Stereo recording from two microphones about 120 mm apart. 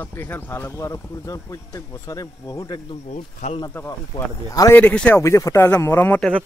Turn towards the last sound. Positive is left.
turn(degrees=20)  # may be behind; listen again after turning